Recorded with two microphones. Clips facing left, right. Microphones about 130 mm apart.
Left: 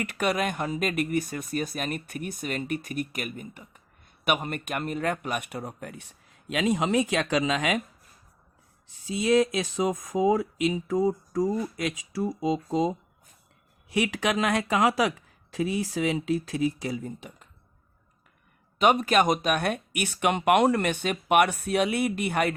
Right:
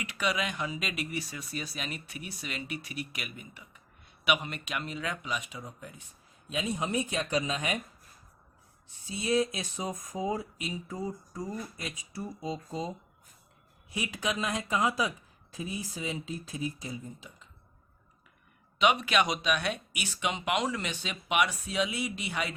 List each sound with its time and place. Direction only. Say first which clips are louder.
0.0 s speech: left 5 dB; 50° left (ahead or behind); by 7.8 s 90° left
9.0 s speech: left 6 dB; 90° left
13.9 s speech: left 8 dB; 75° left (ahead or behind)
18.8 s speech: left 5 dB; 45° left (ahead or behind)